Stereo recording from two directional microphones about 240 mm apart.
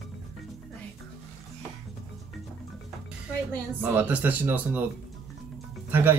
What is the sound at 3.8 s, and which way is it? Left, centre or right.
Speech, centre.